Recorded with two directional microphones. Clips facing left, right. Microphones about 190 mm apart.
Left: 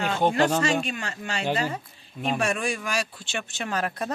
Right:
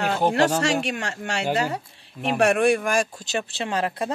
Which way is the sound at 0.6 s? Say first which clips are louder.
Right 2 dB; 75° right (ahead or behind).